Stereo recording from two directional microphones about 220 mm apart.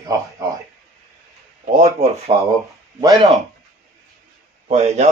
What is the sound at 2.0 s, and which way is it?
Speech, 30° right (ahead or behind).